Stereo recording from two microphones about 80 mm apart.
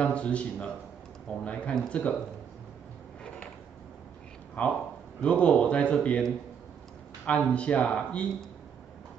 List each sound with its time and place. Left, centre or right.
0.0 s speech: centre
4.6 s speech: centre